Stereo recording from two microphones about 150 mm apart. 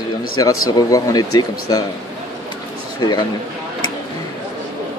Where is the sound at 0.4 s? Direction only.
25° left (ahead or behind).